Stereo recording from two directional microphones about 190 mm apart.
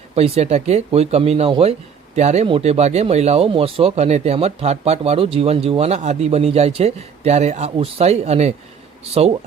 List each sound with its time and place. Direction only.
0.2 s speech: 35° right (ahead or behind)